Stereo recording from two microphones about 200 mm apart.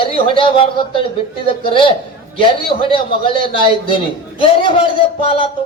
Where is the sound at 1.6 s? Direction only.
25° left (ahead or behind).